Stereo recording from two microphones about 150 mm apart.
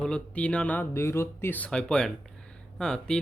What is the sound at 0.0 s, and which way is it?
Speech, 5° left (ahead or behind).